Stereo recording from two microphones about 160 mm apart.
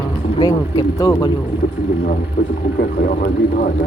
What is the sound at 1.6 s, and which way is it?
Vehicle, 55° left (ahead or behind).